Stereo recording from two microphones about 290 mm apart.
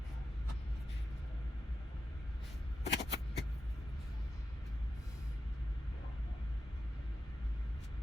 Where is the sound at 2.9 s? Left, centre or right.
Left.